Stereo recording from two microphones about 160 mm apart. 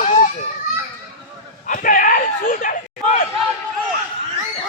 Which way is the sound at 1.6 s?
55° left (ahead or behind).